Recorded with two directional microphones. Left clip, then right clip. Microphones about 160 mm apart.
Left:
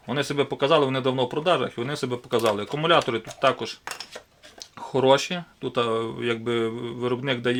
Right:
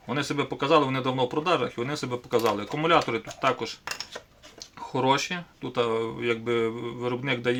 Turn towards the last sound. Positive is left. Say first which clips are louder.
# left 2 dB
turn(degrees=35)  # may be behind; listen again after turning